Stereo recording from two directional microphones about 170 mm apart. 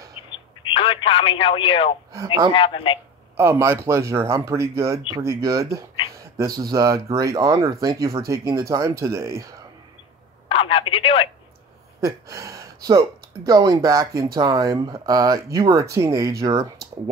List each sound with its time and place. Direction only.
0.1 s telephone: 30° left (ahead or behind)
2.1 s speech: 20° right (ahead or behind)
2.5 s speech: 30° left (ahead or behind)
3.3 s speech: 15° right (ahead or behind)
10.5 s speech: 35° left (ahead or behind)
12.0 s speech: 20° right (ahead or behind)